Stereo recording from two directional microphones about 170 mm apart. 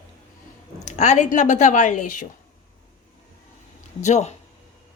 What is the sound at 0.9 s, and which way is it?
A woman's voice, 40° left (ahead or behind).